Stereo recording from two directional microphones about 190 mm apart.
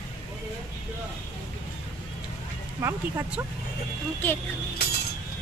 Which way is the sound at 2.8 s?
15° right (ahead or behind).